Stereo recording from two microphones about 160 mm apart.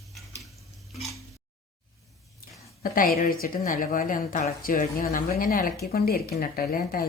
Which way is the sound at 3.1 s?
60° left (ahead or behind).